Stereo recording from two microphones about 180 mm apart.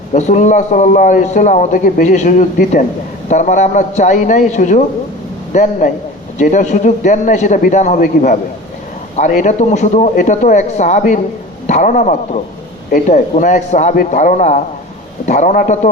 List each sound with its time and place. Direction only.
0.1 s a man's voice: 40° left (ahead or behind)
5.8 s a man's voice: 45° left (ahead or behind)